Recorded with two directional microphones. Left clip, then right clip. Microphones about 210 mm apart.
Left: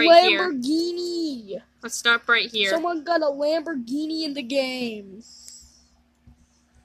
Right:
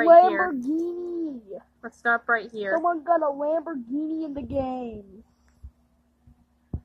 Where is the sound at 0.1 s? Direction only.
55° left (ahead or behind).